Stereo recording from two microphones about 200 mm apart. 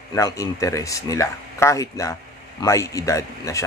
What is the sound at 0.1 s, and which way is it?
Speech, 15° left (ahead or behind).